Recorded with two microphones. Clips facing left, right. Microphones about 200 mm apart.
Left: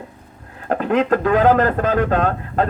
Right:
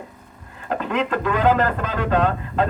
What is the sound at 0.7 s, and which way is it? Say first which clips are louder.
A man's voice: left 6 dB; 50° left (ahead or behind).